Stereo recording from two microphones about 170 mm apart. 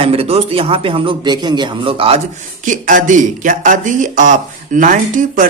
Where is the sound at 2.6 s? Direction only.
50° right (ahead or behind).